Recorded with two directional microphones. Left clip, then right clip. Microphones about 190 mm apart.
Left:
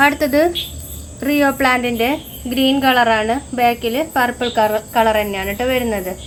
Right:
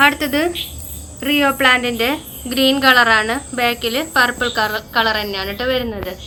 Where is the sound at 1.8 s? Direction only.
35° left (ahead or behind).